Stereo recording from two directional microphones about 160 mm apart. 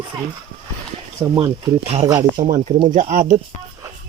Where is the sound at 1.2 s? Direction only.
25° right (ahead or behind).